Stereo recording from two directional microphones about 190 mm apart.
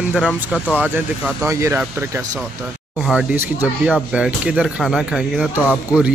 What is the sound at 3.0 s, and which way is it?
Speech, 10° right (ahead or behind).